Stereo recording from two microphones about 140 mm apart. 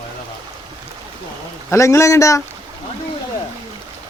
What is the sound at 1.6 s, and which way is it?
Speech, 20° left (ahead or behind).